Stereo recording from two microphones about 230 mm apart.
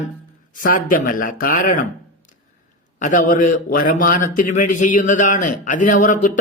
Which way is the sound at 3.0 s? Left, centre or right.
Left.